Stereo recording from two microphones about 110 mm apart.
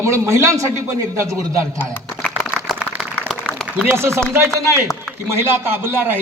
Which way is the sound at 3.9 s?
25° right (ahead or behind).